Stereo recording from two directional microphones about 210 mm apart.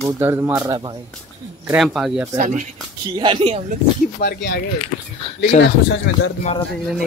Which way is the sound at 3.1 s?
25° right (ahead or behind).